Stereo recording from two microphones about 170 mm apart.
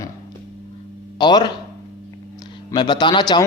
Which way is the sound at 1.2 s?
25° left (ahead or behind).